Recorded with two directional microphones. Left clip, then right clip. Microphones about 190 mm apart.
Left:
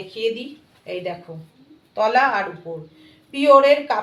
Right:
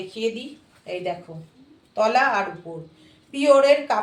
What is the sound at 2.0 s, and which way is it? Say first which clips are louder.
Speech: left 2 dB; 15° left (ahead or behind).